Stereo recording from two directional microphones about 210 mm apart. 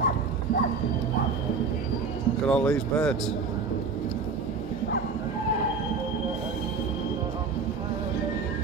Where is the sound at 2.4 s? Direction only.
5° left (ahead or behind).